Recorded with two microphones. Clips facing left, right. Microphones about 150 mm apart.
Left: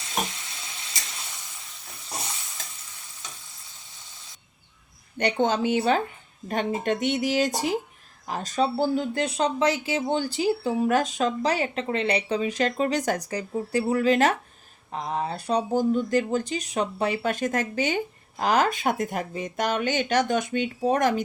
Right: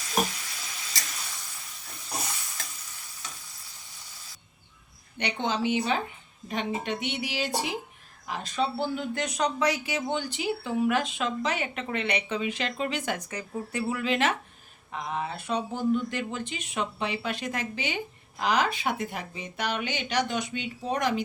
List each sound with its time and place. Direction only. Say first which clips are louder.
0.0 s frying: right 2 dB; 25° left (ahead or behind)
5.1 s speech: left 6 dB; 45° left (ahead or behind)